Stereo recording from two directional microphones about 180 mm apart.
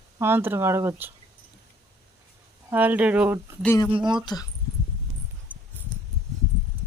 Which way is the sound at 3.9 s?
25° right (ahead or behind).